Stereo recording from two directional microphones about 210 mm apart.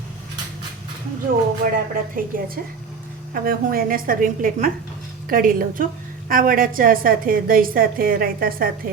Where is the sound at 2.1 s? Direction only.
45° right (ahead or behind).